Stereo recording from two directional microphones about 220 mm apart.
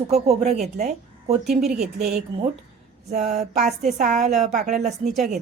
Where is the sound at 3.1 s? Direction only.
30° right (ahead or behind).